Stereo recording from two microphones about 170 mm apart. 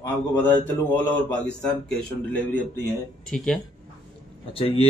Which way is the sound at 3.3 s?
5° left (ahead or behind).